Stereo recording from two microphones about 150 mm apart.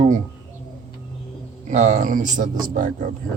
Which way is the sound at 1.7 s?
50° right (ahead or behind).